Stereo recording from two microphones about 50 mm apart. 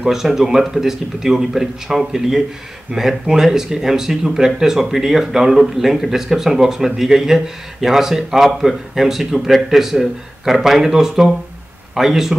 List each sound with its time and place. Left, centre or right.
0.0 s speech: centre